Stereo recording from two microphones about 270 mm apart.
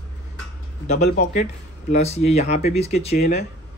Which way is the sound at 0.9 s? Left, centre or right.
Left.